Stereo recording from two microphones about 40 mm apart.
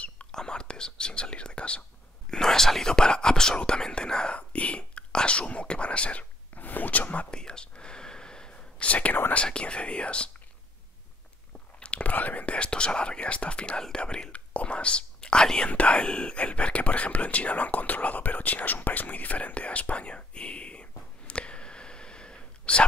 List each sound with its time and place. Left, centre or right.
0.3 s speech: centre
2.3 s speech: centre
4.4 s speech: left
6.5 s speech: left
7.2 s whispering: left
9.3 s speech: left
11.8 s whispering: left
12.1 s speech: left
14.3 s speech: left
15.7 s speech: left